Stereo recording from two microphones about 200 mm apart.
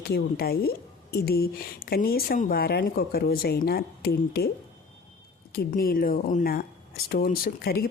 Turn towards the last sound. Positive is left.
turn(degrees=50)  # may be behind; listen again after turning